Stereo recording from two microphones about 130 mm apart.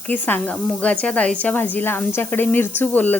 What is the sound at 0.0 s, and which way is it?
Speech, 15° left (ahead or behind).